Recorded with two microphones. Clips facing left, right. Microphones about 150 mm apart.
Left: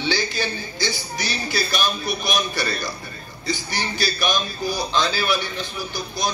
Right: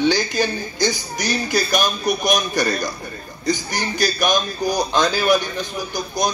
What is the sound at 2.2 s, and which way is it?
Speech, 45° right (ahead or behind).